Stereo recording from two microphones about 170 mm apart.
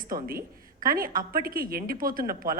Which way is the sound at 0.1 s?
60° right (ahead or behind).